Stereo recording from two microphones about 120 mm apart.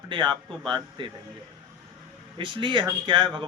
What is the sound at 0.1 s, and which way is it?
Speech, 40° right (ahead or behind).